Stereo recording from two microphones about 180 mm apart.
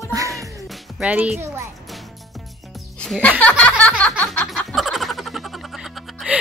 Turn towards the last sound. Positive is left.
turn(degrees=0)  # may be behind; listen again after turning